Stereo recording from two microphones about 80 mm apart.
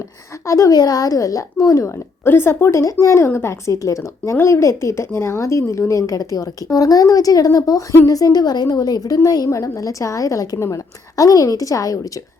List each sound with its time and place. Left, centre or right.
0.4 s a woman's voice: left